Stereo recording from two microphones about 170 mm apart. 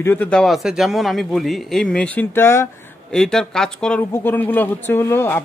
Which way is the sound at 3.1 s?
5° left (ahead or behind).